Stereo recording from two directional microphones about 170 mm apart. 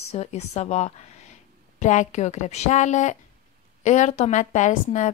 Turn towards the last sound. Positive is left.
turn(degrees=45)  # may be behind; listen again after turning